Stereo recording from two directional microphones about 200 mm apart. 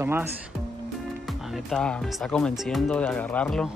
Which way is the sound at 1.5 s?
Centre (ahead or behind).